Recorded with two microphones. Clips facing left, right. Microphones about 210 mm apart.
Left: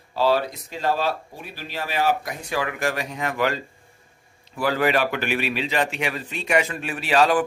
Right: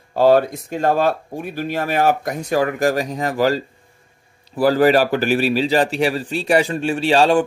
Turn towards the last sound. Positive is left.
turn(degrees=-30)  # may be behind; listen again after turning